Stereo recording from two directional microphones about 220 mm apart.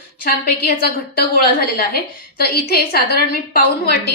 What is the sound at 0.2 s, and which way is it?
Speech, 45° left (ahead or behind).